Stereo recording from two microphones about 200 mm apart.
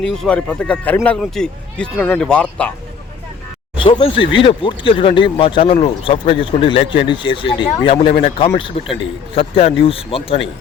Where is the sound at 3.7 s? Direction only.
25° left (ahead or behind).